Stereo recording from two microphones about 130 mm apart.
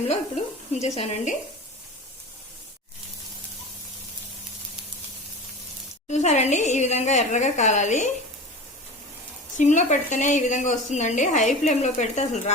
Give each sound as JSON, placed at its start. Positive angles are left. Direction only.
{"t": 0.7, "sound": "a woman's voice", "side_deg": 60}
{"t": 6.1, "sound": "a woman's voice", "side_deg": 60}
{"t": 9.6, "sound": "a woman's voice", "side_deg": 70}